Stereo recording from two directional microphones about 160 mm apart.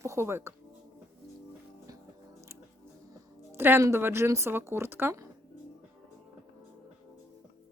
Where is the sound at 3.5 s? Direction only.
15° right (ahead or behind).